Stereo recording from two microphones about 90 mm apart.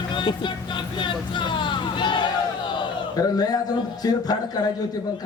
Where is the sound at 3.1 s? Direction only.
45° left (ahead or behind).